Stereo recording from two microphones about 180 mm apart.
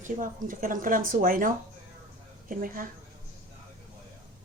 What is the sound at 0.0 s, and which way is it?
Speech, 45° right (ahead or behind).